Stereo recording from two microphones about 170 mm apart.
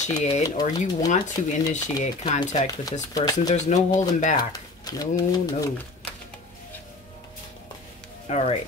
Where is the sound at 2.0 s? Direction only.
45° left (ahead or behind).